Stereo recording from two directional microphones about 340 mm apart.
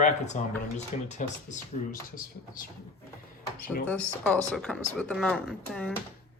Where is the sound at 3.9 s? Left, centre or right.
Centre.